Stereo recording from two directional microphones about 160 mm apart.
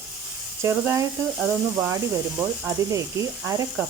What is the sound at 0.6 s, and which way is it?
Speech, 15° right (ahead or behind).